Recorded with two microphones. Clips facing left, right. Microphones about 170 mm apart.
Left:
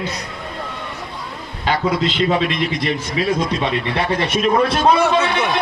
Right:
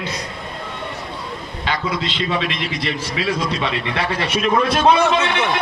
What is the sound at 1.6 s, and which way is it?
A man's voice, 45° left (ahead or behind).